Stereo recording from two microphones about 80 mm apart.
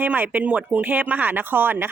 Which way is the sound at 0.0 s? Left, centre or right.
Right.